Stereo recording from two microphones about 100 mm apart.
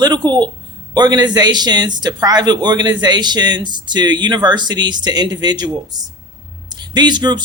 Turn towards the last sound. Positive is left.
turn(degrees=-45)  # may be behind; listen again after turning